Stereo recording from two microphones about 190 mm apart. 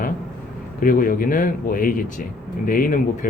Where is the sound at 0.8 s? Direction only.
50° left (ahead or behind).